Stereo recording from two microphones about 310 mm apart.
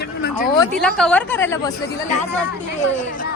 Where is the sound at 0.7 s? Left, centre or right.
Centre.